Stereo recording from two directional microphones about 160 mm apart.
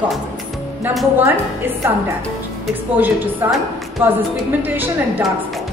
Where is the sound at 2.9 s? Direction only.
10° right (ahead or behind).